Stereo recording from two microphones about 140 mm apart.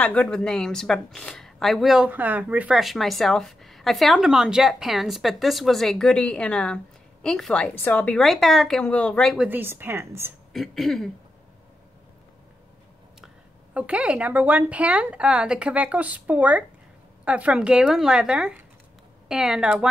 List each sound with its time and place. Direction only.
0.0 s a woman's voice: 5° left (ahead or behind)
9.4 s a woman's voice: 15° right (ahead or behind)
10.5 s a woman's voice: centre (ahead or behind)
13.7 s a woman's voice: 10° right (ahead or behind)